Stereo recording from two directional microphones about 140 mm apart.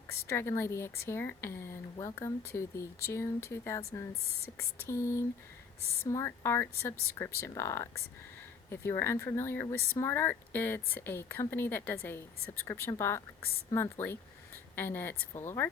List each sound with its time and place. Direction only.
0.1 s a woman's voice: 20° left (ahead or behind)